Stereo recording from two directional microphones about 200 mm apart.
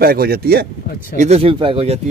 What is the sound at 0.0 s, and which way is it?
Speech, 50° right (ahead or behind).